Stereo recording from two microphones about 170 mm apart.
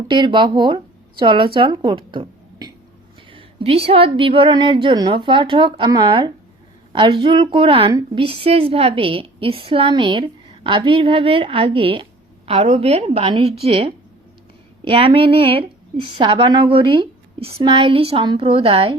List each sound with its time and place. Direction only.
0.1 s a woman's voice: 25° right (ahead or behind)